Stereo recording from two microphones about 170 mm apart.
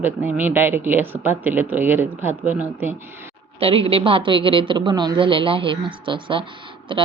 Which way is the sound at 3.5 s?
35° right (ahead or behind).